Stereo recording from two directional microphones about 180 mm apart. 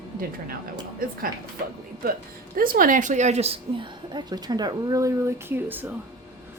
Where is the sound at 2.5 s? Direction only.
50° right (ahead or behind); by 5.9 s 10° right (ahead or behind).